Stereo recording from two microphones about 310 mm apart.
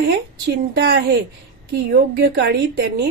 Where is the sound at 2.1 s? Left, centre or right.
Right.